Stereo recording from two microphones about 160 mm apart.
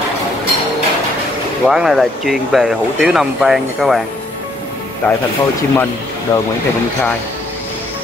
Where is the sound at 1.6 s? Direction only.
Centre (ahead or behind).